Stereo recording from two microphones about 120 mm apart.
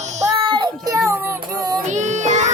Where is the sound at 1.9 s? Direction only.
85° right.